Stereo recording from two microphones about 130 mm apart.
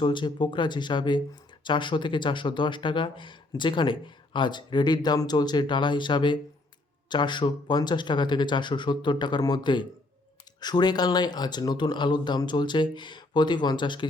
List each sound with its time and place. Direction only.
0.0 s speech: 35° left (ahead or behind)